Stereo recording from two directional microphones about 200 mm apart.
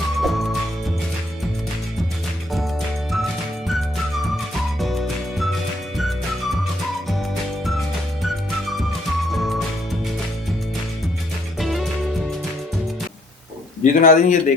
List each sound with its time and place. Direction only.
0.2 s music: centre (ahead or behind)
4.4 s music: centre (ahead or behind)
11.6 s music: centre (ahead or behind)
13.8 s a man's voice: 40° left (ahead or behind)